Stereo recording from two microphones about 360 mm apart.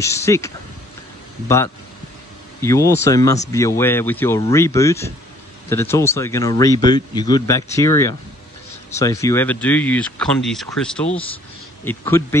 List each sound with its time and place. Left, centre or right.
0.0 s speech: centre
2.6 s speech: centre